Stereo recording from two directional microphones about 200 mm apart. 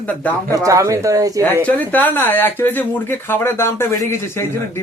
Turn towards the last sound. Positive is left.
turn(degrees=10)  # may be behind; listen again after turning